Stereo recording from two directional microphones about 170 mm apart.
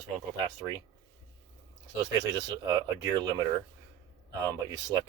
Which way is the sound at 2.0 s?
20° right (ahead or behind).